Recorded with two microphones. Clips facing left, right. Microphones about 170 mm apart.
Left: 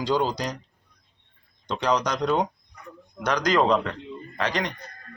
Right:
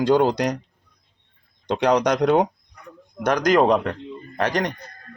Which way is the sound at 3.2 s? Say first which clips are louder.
Right 5 dB; 50° right (ahead or behind).